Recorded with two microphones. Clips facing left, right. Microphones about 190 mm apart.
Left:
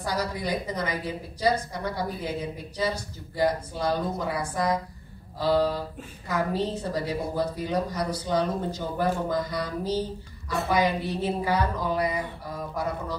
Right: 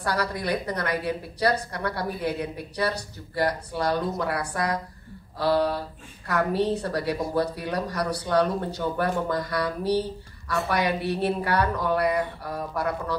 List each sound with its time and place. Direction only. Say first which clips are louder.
0.0 s a woman's voice: right 2 dB; 65° right (ahead or behind)